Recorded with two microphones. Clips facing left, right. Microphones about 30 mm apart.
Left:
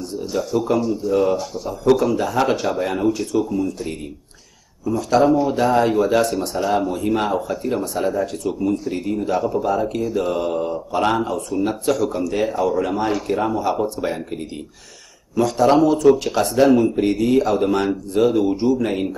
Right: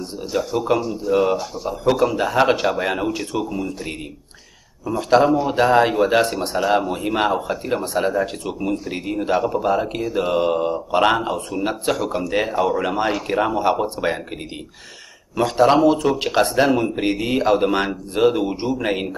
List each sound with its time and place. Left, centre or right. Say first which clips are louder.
0.0 s speech: left 2 dB; right
0.3 s speech: even; centre; by 14.1 s right
15.3 s speech: even; right